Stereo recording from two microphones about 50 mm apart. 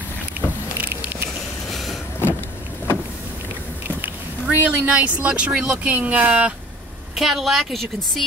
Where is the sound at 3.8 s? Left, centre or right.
Right.